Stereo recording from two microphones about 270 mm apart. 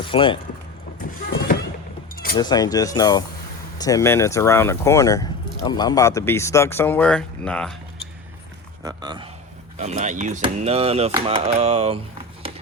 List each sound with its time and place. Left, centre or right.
0.0 s speech: centre
2.3 s speech: centre
8.8 s speech: centre